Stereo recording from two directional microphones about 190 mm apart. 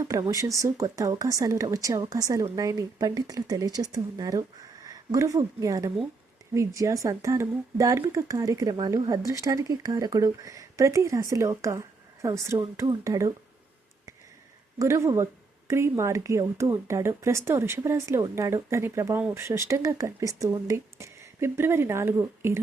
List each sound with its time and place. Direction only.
0.0 s speech: 15° right (ahead or behind)
14.8 s speech: 15° right (ahead or behind)